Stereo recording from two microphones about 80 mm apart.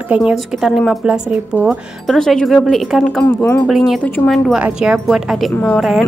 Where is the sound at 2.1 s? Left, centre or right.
Centre.